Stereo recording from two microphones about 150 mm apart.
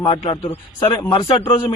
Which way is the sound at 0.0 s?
35° left (ahead or behind).